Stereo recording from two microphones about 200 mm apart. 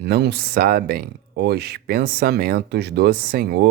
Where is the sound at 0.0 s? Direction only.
55° right (ahead or behind).